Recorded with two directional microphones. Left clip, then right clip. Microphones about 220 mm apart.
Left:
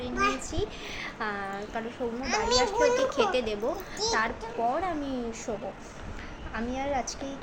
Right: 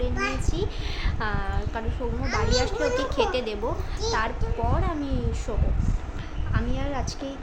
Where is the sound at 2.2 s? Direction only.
25° left (ahead or behind).